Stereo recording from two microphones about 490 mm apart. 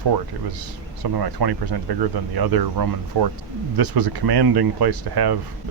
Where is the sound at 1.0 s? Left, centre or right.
Right.